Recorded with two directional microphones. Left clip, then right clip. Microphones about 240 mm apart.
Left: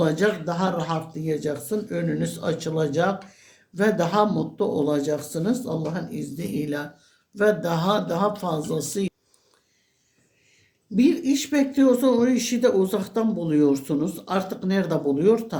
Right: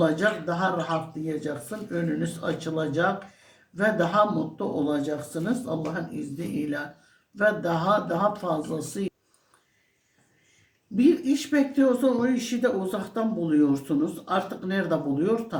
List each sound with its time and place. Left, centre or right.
0.0 s speech: left
10.9 s speech: left